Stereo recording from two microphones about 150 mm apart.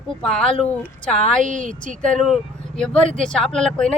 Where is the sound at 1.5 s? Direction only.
60° right (ahead or behind).